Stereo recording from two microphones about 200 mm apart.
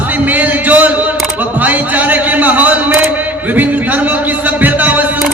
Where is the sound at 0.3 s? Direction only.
10° right (ahead or behind).